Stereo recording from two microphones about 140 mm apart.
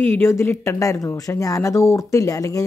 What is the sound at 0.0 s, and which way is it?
Speech, 15° left (ahead or behind).